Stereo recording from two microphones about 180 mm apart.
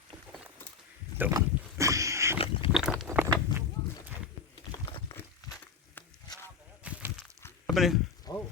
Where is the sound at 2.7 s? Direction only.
Centre (ahead or behind).